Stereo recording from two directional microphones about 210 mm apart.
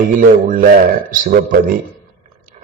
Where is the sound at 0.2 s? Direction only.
40° right (ahead or behind).